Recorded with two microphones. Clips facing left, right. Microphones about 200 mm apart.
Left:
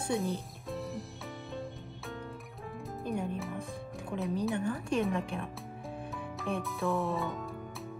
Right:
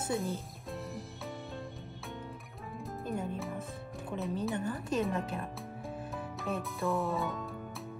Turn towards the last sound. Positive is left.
turn(degrees=0)  # may be behind; listen again after turning